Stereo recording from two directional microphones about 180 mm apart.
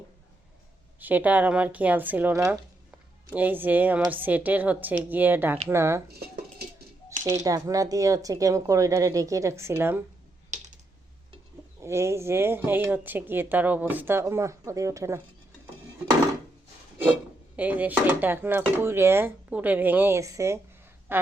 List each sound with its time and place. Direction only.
0.9 s speech: 10° right (ahead or behind)
7.3 s speech: 20° right (ahead or behind)
11.8 s speech: 15° right (ahead or behind)
17.6 s speech: 10° right (ahead or behind)
21.1 s a sound: 10° right (ahead or behind)